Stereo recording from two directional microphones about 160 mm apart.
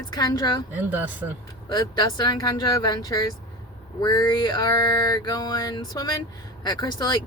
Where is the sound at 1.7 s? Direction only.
25° left (ahead or behind).